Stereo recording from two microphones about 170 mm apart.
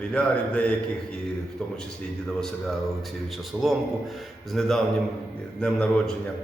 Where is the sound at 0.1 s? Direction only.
5° left (ahead or behind).